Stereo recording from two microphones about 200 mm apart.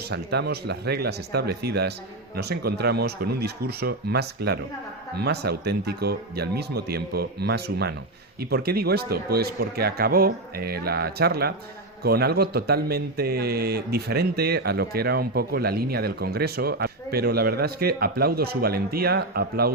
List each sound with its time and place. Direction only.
0.1 s speech: 55° right (ahead or behind)